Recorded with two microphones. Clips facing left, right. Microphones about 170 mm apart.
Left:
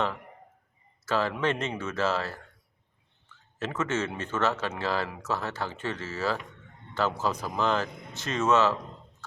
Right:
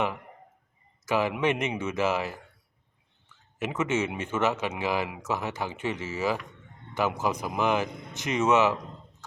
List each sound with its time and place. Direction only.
1.0 s speech: 15° right (ahead or behind)
3.6 s speech: 15° right (ahead or behind)